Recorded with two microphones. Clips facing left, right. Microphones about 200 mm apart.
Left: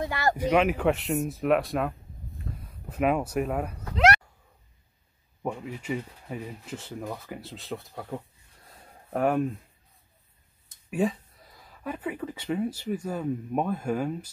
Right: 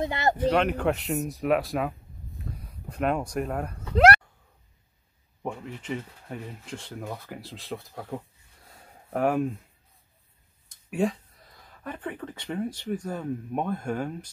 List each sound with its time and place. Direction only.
0.0 s speech: 20° right (ahead or behind)
0.4 s speech: 5° left (ahead or behind)
3.9 s a sound: 55° right (ahead or behind)
5.4 s speech: 10° left (ahead or behind)
8.7 s a sound: centre (ahead or behind)
10.9 s speech: 5° left (ahead or behind)